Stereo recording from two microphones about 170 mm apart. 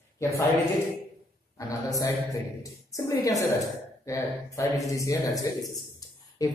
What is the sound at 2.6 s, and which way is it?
A woman's voice, 20° left (ahead or behind).